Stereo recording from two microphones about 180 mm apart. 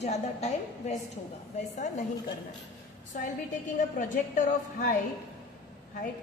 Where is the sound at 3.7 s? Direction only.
45° left (ahead or behind).